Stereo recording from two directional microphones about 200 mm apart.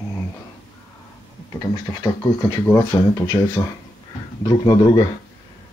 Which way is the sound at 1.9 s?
15° left (ahead or behind).